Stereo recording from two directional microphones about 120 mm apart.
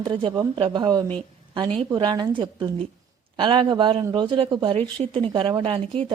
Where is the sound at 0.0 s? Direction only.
40° right (ahead or behind).